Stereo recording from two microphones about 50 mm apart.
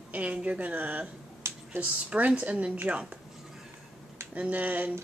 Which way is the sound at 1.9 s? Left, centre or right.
Right.